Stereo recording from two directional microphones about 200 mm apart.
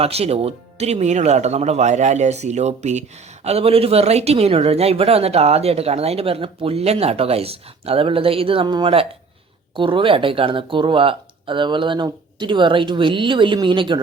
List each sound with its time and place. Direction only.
0.0 s speech: 30° right (ahead or behind)